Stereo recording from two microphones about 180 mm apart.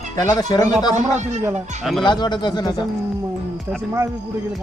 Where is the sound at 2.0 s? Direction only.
25° left (ahead or behind).